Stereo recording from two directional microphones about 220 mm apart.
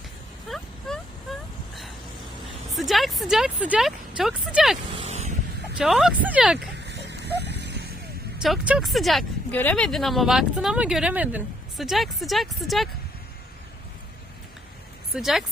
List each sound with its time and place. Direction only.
0.4 s a sound: centre (ahead or behind)
2.7 s speech: centre (ahead or behind)
4.9 s vehicle: 25° right (ahead or behind)
5.7 s speech: centre (ahead or behind)
6.7 s dog: 50° right (ahead or behind)
8.4 s speech: 5° right (ahead or behind)
15.1 s speech: centre (ahead or behind)